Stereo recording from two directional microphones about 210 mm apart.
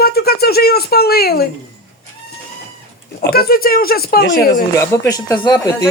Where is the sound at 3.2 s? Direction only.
45° left (ahead or behind).